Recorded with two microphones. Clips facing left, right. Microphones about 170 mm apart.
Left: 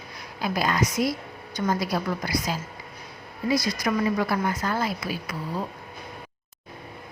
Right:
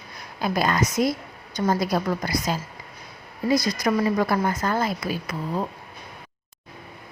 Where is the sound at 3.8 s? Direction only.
45° right (ahead or behind).